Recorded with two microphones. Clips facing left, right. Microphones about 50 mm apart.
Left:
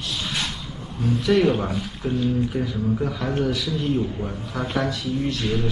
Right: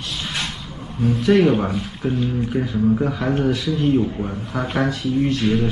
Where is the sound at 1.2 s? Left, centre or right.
Centre.